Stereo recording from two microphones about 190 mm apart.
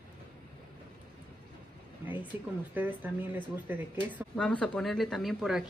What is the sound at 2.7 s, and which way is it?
Speech, 10° right (ahead or behind).